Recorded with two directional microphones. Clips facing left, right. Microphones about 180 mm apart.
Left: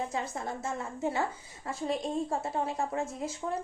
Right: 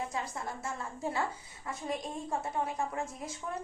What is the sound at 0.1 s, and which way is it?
A woman's voice, 25° left (ahead or behind).